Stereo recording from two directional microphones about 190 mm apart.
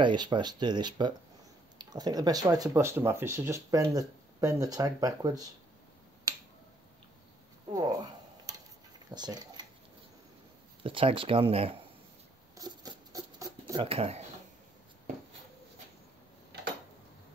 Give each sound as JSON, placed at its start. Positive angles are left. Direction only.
{"t": 0.0, "sound": "speech", "side_deg": -25}
{"t": 7.7, "sound": "dishes", "side_deg": -20}
{"t": 9.1, "sound": "speech", "side_deg": -20}
{"t": 10.8, "sound": "speech", "side_deg": -30}
{"t": 12.5, "sound": "patter", "side_deg": -20}
{"t": 13.8, "sound": "speech", "side_deg": -30}